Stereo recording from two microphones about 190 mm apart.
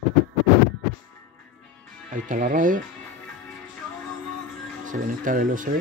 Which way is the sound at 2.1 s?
45° right (ahead or behind).